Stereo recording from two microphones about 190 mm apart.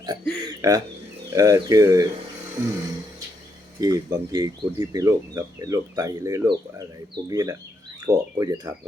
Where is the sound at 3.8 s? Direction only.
20° right (ahead or behind).